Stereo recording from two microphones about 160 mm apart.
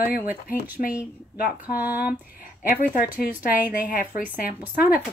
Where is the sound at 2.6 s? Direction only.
65° left (ahead or behind).